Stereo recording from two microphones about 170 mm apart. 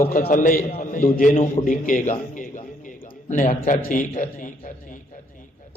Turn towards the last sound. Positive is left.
turn(degrees=50)  # may be behind; listen again after turning